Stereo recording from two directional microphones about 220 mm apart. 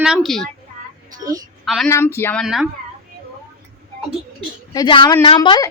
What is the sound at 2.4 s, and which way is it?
Speech, centre (ahead or behind).